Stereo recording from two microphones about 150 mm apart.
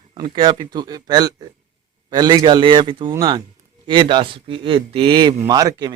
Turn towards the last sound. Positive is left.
turn(degrees=-25)  # may be behind; listen again after turning